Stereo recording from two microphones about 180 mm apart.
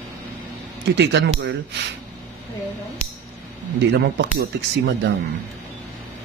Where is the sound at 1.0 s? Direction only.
75° right (ahead or behind).